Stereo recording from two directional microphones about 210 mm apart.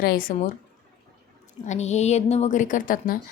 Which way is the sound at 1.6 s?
35° left (ahead or behind).